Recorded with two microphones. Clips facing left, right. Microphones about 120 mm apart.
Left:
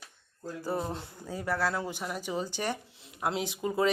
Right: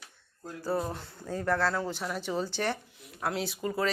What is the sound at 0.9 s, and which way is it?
Speech, 10° left (ahead or behind).